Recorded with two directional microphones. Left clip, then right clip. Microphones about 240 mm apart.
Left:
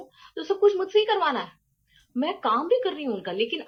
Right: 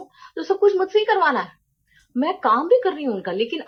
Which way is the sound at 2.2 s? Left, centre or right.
Right.